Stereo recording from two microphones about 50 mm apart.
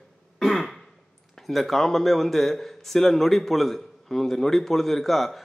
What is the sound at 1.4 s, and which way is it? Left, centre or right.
A man's voice, centre.